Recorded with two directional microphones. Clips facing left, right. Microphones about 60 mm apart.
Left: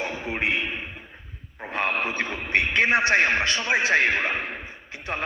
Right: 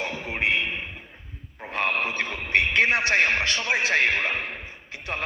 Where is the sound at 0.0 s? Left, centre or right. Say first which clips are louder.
Left 1 dB; left.